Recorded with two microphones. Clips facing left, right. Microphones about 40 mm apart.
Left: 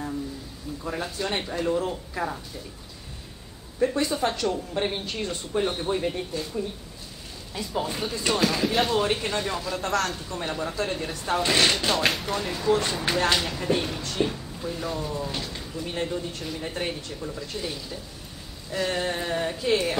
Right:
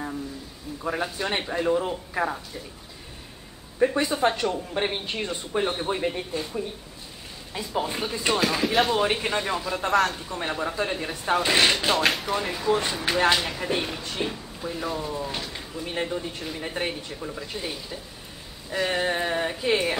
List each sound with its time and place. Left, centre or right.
0.8 s speech: centre
3.8 s speech: right
9.0 s speech: centre